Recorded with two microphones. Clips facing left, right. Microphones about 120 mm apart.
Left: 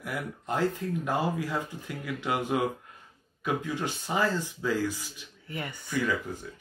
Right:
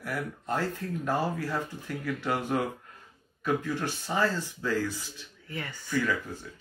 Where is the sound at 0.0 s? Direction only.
15° left (ahead or behind).